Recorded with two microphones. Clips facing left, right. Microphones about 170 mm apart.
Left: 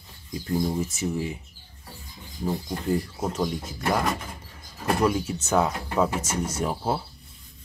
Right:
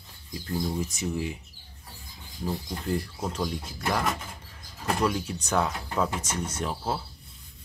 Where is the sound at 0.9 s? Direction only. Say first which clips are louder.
Left 2 dB; centre (ahead or behind).